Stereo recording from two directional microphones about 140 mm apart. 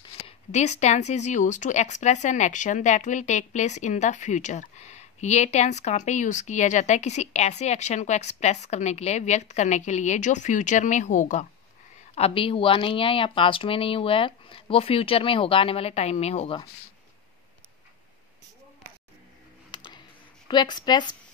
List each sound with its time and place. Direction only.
0.5 s speech: 55° left (ahead or behind)
12.2 s speech: 40° left (ahead or behind)
19.7 s a sound: 30° left (ahead or behind)
20.4 s speech: 30° left (ahead or behind)